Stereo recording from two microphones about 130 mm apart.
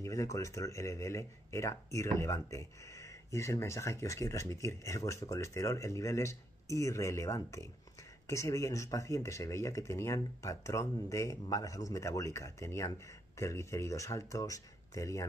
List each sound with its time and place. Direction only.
0.0 s speech: 25° left (ahead or behind)